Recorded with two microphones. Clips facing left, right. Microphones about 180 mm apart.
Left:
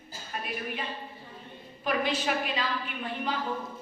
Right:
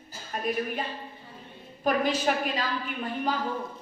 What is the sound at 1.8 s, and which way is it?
Speech, 45° right (ahead or behind).